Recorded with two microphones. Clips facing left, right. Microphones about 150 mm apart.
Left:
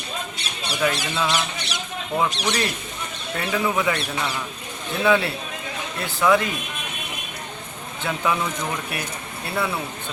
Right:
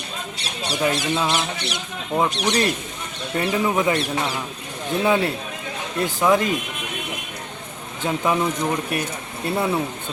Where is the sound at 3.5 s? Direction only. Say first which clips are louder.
Right 2 dB; 35° right (ahead or behind).